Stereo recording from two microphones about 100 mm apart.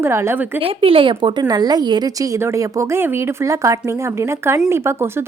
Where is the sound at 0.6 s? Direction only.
65° right (ahead or behind); by 2.3 s 45° right (ahead or behind).